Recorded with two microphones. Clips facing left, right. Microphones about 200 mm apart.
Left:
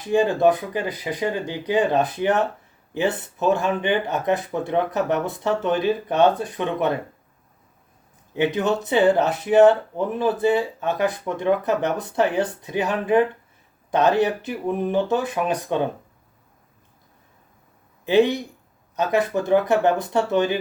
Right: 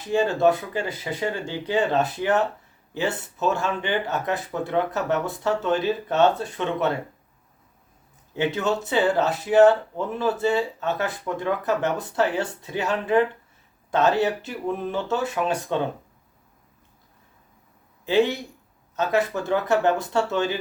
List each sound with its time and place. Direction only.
0.0 s speech: 15° left (ahead or behind)
8.3 s speech: 15° left (ahead or behind)
18.0 s speech: 20° left (ahead or behind)